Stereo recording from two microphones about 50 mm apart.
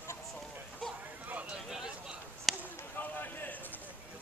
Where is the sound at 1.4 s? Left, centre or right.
Centre.